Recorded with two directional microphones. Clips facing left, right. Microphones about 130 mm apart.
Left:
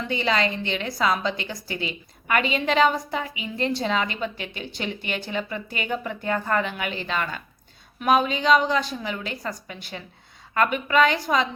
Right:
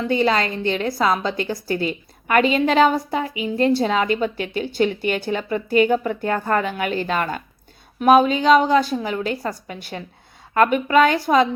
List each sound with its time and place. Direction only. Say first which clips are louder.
0.1 s a woman's voice: right 4 dB; 40° right (ahead or behind)